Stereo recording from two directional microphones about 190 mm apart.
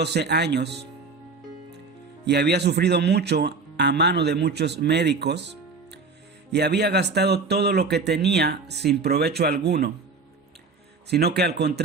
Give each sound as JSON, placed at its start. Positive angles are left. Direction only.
{"t": 0.0, "sound": "speech", "side_deg": -60}
{"t": 2.2, "sound": "speech", "side_deg": -60}
{"t": 11.1, "sound": "speech", "side_deg": -60}